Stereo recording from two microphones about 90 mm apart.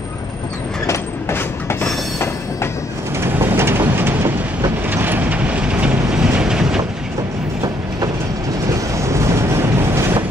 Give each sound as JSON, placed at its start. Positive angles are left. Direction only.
{"t": 0.8, "sound": "train", "side_deg": 25}
{"t": 3.2, "sound": "train", "side_deg": -25}
{"t": 4.6, "sound": "vehicle", "side_deg": -20}
{"t": 8.9, "sound": "vehicle", "side_deg": -35}